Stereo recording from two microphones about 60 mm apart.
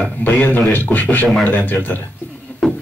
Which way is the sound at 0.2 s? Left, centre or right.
Left.